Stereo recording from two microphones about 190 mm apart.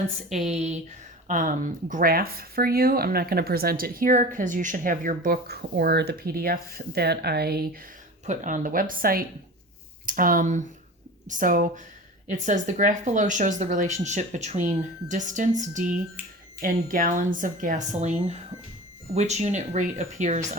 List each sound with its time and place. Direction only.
0.4 s speech: 35° right (ahead or behind); by 7.8 s 55° right (ahead or behind)
8.3 s speech: 40° right (ahead or behind)
15.8 s speech: 10° right (ahead or behind)
16.6 s speech: 50° right (ahead or behind)